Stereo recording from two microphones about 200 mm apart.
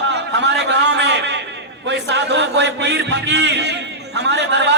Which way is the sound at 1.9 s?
60° right (ahead or behind).